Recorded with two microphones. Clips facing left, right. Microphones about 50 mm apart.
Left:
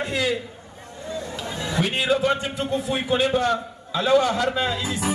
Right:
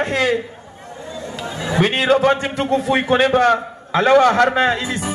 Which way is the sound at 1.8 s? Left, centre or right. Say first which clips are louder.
Right 7 dB; right.